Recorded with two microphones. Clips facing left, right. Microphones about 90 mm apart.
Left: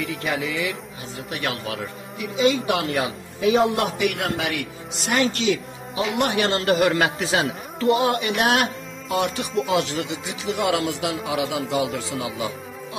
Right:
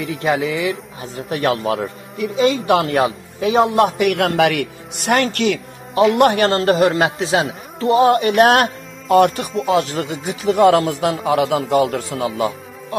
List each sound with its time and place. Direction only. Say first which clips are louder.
0.0 s a man's voice: right 7 dB; 35° right (ahead or behind)
4.0 s a man's voice: right 8 dB; 65° right (ahead or behind); by 7.4 s 25° right (ahead or behind)
7.8 s a man's voice: right 6 dB; 35° right (ahead or behind)